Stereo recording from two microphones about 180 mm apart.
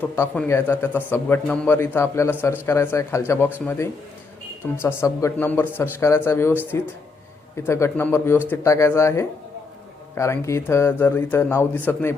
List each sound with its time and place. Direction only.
0.0 s a man's voice: 10° left (ahead or behind)
4.8 s a man's voice: 15° left (ahead or behind)